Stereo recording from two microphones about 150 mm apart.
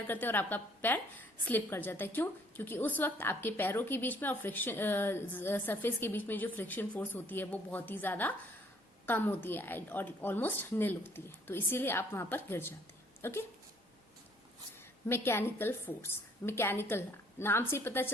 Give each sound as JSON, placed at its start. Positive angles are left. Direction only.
{"t": 0.1, "sound": "a woman's voice", "side_deg": 15}
{"t": 15.0, "sound": "a woman's voice", "side_deg": 15}